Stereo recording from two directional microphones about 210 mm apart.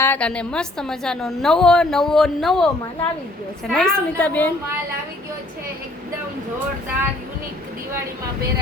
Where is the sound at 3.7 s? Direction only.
5° left (ahead or behind).